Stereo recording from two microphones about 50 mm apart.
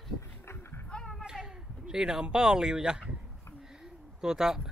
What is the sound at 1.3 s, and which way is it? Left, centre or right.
Speech, centre.